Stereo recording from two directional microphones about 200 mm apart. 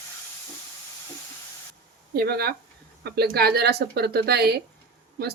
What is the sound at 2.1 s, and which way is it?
Speech, 50° right (ahead or behind).